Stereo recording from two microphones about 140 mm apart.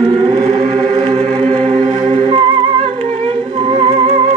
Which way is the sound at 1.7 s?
40° right (ahead or behind).